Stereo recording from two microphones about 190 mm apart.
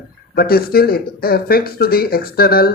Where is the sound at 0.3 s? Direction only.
55° left (ahead or behind).